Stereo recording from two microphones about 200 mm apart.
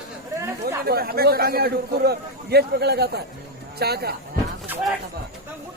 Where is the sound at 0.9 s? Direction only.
50° right (ahead or behind).